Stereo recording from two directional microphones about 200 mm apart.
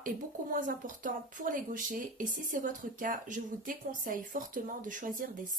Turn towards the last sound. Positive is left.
turn(degrees=-40)  # may be behind; listen again after turning